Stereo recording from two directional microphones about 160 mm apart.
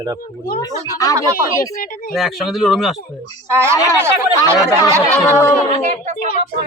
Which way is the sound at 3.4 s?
15° right (ahead or behind).